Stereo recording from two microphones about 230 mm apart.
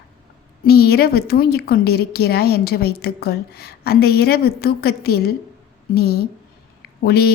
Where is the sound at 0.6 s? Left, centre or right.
Left.